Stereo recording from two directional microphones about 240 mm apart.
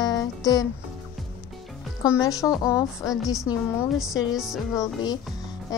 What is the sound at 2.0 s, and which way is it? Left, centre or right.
Speech, centre.